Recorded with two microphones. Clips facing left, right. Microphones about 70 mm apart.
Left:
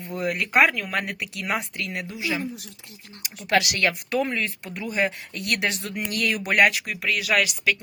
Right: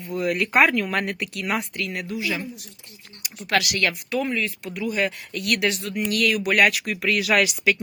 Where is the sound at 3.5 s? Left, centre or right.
Left.